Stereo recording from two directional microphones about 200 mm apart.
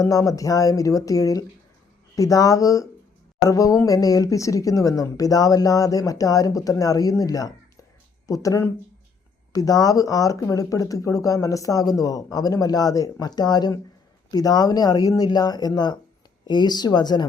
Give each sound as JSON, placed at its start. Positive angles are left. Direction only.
{"t": 0.0, "sound": "speech", "side_deg": 15}